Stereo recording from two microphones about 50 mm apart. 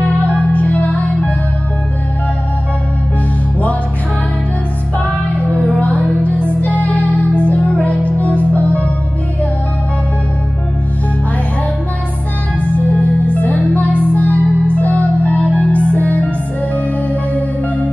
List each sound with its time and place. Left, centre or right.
0.2 s music: left
5.5 s music: left
12.5 s music: left